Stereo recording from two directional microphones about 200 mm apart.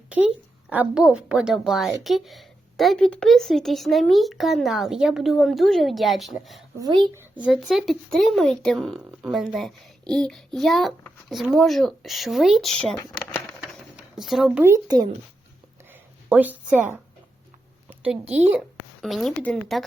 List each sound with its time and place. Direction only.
0.7 s speech: 5° right (ahead or behind)
6.7 s speech: 20° right (ahead or behind)
7.4 s speech: centre (ahead or behind)
13.6 s a sound: 5° right (ahead or behind)
14.6 s speech: 15° right (ahead or behind)
15.9 s a sound: 10° right (ahead or behind)
18.3 s speech: 10° right (ahead or behind)